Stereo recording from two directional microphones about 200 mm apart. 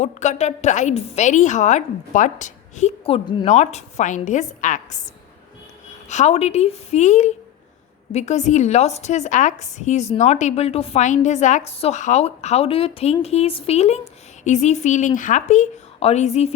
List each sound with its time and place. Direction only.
0.0 s a woman's voice: 35° left (ahead or behind)
6.1 s a woman's voice: 35° left (ahead or behind)